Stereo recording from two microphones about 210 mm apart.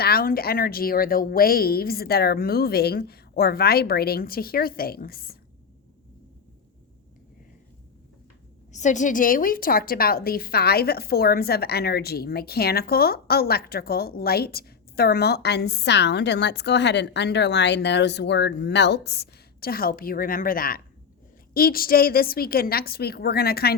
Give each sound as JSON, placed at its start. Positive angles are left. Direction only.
{"t": 0.0, "sound": "a woman's voice", "side_deg": 45}
{"t": 8.7, "sound": "a woman's voice", "side_deg": 35}